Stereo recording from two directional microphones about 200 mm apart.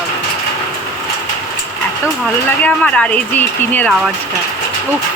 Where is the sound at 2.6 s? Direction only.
5° left (ahead or behind).